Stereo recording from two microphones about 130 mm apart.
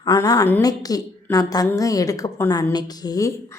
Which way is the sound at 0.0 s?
30° left (ahead or behind).